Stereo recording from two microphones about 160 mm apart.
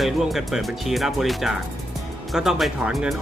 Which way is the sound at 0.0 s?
Centre (ahead or behind).